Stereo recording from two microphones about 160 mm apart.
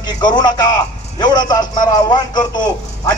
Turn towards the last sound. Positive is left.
turn(degrees=25)  # may be behind; listen again after turning